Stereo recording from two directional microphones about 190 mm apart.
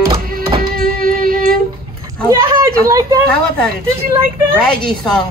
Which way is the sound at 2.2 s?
15° right (ahead or behind).